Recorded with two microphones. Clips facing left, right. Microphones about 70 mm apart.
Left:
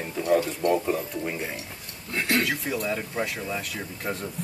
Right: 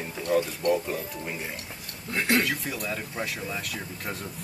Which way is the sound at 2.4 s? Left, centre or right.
Centre.